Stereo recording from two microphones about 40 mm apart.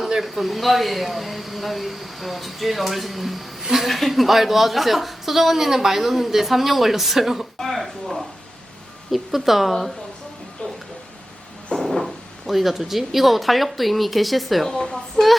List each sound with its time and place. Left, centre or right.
0.0 s a woman's voice: centre
11.9 s speech: centre
14.7 s a woman's voice: centre
15.1 s a sound: centre